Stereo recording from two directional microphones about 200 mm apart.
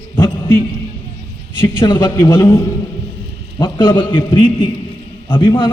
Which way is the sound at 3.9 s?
25° left (ahead or behind).